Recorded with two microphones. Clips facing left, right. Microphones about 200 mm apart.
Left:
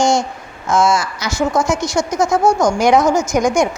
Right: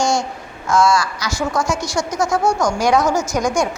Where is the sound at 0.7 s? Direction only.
20° left (ahead or behind).